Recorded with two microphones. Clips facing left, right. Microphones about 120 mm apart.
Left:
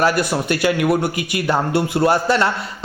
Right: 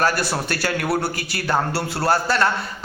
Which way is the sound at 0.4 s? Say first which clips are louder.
Left 6 dB; 15° left (ahead or behind).